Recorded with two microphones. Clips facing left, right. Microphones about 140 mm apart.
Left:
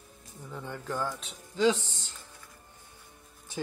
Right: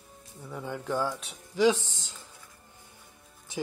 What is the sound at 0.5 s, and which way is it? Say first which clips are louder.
Speech: right 4 dB; 10° right (ahead or behind).